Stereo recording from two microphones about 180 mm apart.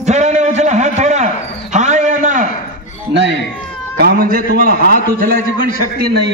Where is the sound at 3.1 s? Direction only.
75° right (ahead or behind).